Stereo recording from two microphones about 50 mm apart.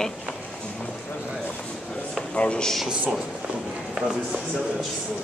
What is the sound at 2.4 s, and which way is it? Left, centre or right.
Speech, left.